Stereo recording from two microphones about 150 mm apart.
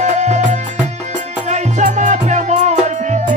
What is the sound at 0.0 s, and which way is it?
Music, 50° right (ahead or behind).